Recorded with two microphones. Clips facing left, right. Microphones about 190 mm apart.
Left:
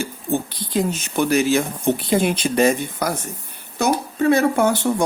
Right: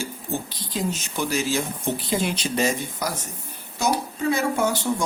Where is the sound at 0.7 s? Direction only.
60° left (ahead or behind).